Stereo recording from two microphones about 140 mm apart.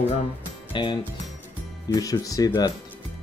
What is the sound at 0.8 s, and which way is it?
Speech, 35° left (ahead or behind).